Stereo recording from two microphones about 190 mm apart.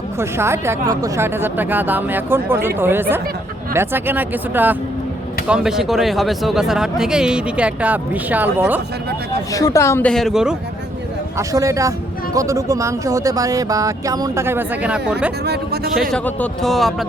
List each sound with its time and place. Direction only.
0.2 s speech: 15° right (ahead or behind)
9.5 s speech: 20° left (ahead or behind); by 10.6 s 5° right (ahead or behind)
11.3 s speech: 15° right (ahead or behind)
15.4 s speech: 55° right (ahead or behind)
16.1 s speech: 5° left (ahead or behind)